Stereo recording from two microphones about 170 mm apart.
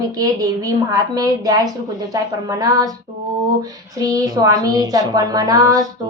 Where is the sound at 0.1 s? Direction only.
20° right (ahead or behind).